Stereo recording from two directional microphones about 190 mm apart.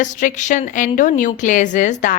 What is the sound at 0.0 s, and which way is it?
A woman's voice, 40° left (ahead or behind).